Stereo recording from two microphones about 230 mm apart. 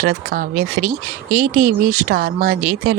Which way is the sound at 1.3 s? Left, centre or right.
Right.